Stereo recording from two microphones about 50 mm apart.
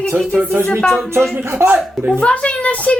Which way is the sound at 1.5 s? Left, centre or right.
Right.